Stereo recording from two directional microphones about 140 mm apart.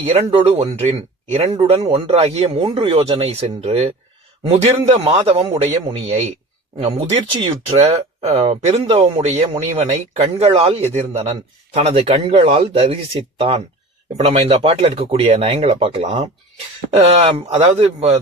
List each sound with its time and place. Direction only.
0.1 s speech: 45° right (ahead or behind)
7.3 s speech: 35° right (ahead or behind)
16.9 s speech: 55° right (ahead or behind)